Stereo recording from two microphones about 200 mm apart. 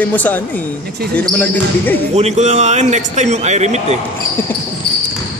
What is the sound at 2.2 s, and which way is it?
Speech, 35° right (ahead or behind).